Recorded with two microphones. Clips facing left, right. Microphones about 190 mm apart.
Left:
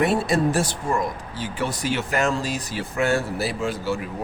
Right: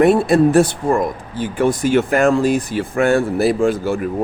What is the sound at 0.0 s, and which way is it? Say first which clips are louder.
Speech: right 8 dB; 55° right (ahead or behind).